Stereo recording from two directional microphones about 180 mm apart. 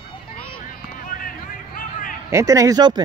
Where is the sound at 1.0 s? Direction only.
50° left (ahead or behind).